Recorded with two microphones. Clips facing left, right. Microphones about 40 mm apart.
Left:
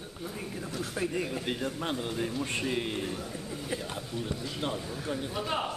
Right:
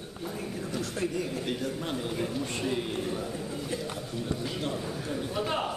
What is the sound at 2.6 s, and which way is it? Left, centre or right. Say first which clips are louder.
Speech: right 1 dB; centre.